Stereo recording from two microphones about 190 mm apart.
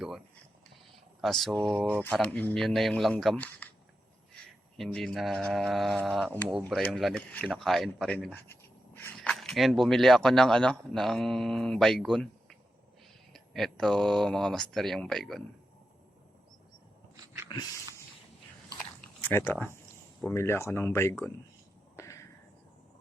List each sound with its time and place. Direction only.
1.2 s speech: centre (ahead or behind)
1.7 s speech: 10° right (ahead or behind)
2.0 s speech: 5° left (ahead or behind)
4.8 s speech: centre (ahead or behind)
17.5 s a sound: 25° left (ahead or behind)
19.2 s speech: 10° left (ahead or behind)
21.9 s a sound: 15° left (ahead or behind)